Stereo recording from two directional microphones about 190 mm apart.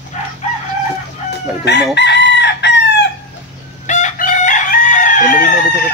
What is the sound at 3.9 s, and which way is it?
Chicken, 40° left (ahead or behind).